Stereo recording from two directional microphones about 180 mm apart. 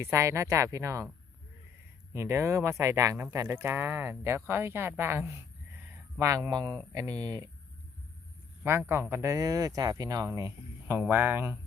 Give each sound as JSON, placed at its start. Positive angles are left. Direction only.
{"t": 0.0, "sound": "speech", "side_deg": -15}
{"t": 2.1, "sound": "speech", "side_deg": -15}
{"t": 8.6, "sound": "speech", "side_deg": -15}